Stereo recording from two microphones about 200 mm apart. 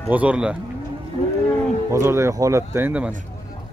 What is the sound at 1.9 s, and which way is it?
Speech, 15° right (ahead or behind).